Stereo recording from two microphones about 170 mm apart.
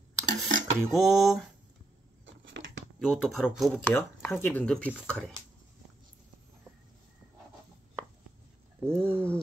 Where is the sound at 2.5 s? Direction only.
90° right.